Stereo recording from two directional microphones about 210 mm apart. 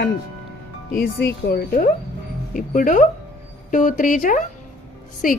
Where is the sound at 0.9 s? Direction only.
45° left (ahead or behind).